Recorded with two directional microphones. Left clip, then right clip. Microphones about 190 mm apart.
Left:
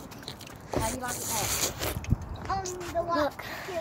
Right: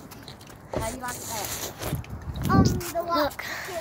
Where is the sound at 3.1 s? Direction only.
25° right (ahead or behind).